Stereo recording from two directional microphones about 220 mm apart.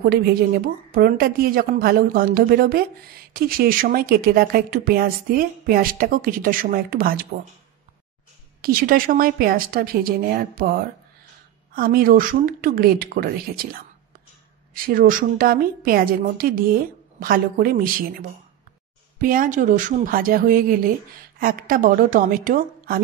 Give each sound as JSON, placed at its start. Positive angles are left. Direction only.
{"t": 0.0, "sound": "a woman's voice", "side_deg": -45}
{"t": 8.5, "sound": "a woman's voice", "side_deg": -40}
{"t": 14.7, "sound": "a woman's voice", "side_deg": -40}
{"t": 19.1, "sound": "a woman's voice", "side_deg": -40}